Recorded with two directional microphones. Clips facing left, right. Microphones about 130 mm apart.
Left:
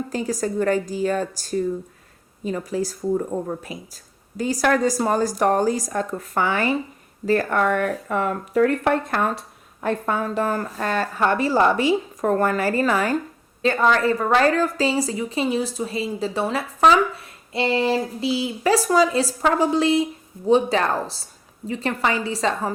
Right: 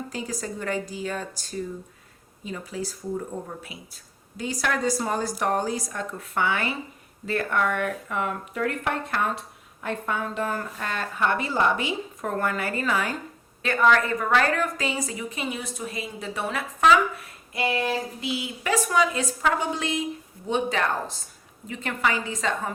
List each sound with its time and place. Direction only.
0.1 s a woman's voice: 45° left (ahead or behind)
2.4 s a woman's voice: 45° left (ahead or behind)
13.6 s a woman's voice: 30° left (ahead or behind)